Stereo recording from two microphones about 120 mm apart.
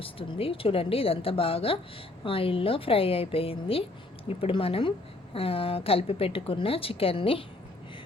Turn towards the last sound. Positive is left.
turn(degrees=50)  # may be behind; listen again after turning